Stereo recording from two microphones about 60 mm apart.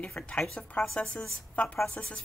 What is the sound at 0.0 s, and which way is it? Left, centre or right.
Speech, left.